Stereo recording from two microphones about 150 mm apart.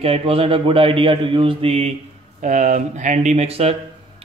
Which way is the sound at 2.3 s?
55° right (ahead or behind).